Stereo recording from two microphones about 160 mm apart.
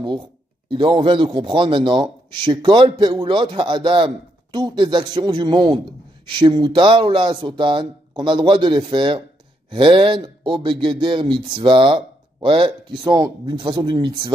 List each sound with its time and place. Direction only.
0.7 s a man's voice: 30° right (ahead or behind)